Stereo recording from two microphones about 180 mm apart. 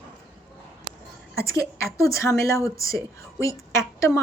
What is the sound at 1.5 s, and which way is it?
A woman's voice, 15° left (ahead or behind).